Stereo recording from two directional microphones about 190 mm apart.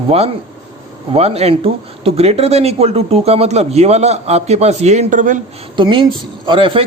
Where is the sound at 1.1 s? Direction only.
35° right (ahead or behind).